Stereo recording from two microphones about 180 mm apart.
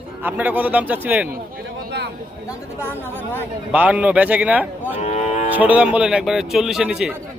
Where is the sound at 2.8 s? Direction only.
10° left (ahead or behind).